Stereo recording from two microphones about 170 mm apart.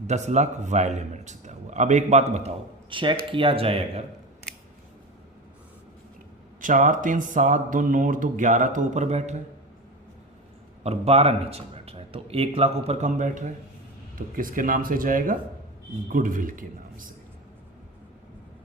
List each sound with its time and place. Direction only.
0.1 s speech: 40° right (ahead or behind)
2.9 s speech: 30° right (ahead or behind)
6.6 s speech: 50° right (ahead or behind)
10.8 s speech: 35° right (ahead or behind); by 17.1 s 55° right (ahead or behind)